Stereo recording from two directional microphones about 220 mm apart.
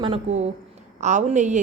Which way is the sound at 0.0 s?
30° right (ahead or behind).